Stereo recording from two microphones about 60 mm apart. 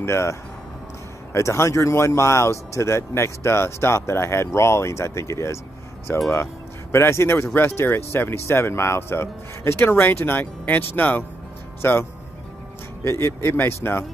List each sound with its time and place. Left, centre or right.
0.0 s speech: left